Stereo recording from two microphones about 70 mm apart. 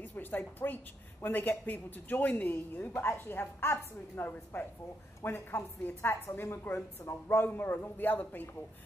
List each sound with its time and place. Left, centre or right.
0.0 s a woman's voice: left